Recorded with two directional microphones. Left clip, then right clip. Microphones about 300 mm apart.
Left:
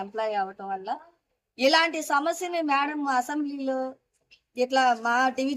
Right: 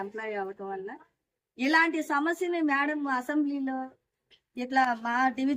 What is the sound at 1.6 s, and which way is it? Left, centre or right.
A woman's voice, centre.